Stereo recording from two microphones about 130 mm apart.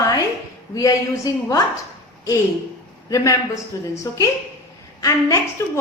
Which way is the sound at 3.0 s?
25° left (ahead or behind).